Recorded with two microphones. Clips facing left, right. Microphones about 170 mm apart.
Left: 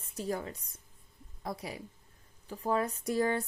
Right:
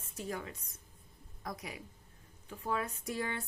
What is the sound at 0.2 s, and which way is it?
Speech, 35° left (ahead or behind).